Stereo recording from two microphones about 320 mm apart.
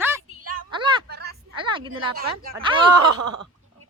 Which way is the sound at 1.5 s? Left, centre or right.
Centre.